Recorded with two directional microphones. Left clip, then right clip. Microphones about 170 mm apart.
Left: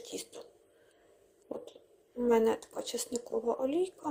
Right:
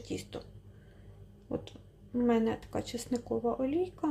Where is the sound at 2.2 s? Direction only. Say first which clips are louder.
Left 4 dB; 15° left (ahead or behind).